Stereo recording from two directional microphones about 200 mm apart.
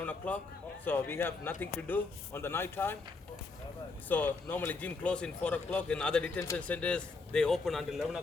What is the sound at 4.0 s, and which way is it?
Speech, 10° left (ahead or behind).